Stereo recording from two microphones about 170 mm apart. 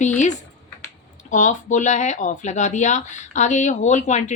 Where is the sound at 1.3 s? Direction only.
45° left (ahead or behind).